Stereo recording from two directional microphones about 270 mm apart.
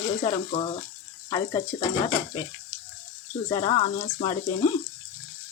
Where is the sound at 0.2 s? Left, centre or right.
Left.